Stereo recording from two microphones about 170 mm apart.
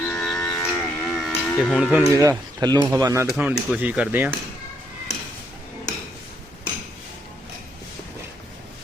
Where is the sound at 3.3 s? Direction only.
5° right (ahead or behind).